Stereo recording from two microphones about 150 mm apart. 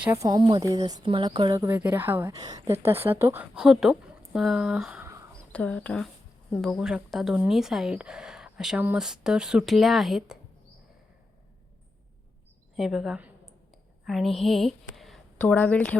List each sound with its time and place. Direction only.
0.1 s speech: 25° right (ahead or behind)
1.5 s speech: 15° right (ahead or behind)
2.3 s speech: 25° right (ahead or behind)
2.8 s speech: 15° right (ahead or behind)
5.0 s a sound: 20° right (ahead or behind)
5.5 s speech: 10° left (ahead or behind)
12.7 s a woman's voice: centre (ahead or behind)